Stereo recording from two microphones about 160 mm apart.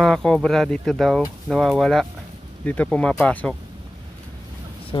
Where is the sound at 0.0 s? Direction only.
5° left (ahead or behind).